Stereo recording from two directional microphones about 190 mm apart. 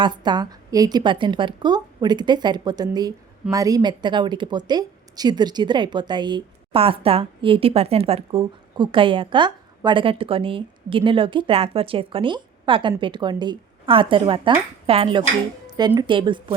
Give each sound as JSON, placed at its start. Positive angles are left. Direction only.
{"t": 0.0, "sound": "a woman's voice", "side_deg": -25}